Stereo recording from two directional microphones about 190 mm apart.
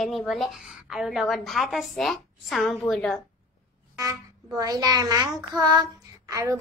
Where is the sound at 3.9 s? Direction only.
20° right (ahead or behind).